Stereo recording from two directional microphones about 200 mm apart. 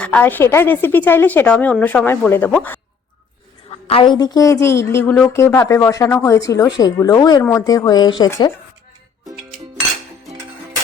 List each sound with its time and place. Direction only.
0.0 s a woman's voice: 5° left (ahead or behind)
3.7 s a woman's voice: 30° left (ahead or behind)